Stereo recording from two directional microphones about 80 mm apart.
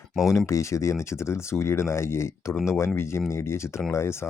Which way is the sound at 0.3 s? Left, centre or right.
Left.